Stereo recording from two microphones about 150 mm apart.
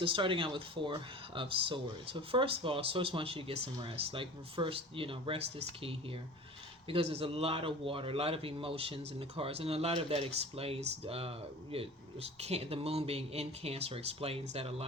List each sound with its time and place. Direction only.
0.0 s a man's voice: 35° right (ahead or behind)